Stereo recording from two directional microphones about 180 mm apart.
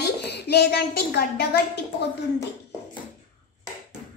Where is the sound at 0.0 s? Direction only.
65° left (ahead or behind).